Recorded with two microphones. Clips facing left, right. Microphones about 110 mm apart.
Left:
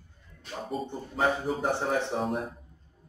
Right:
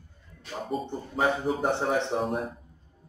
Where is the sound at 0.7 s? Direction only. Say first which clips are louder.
Right 2 dB; centre (ahead or behind).